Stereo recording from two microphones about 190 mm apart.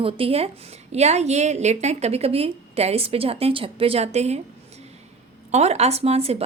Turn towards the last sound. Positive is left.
turn(degrees=-30)  # may be behind; listen again after turning